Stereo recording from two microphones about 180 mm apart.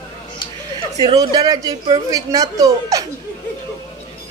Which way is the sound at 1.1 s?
20° right (ahead or behind).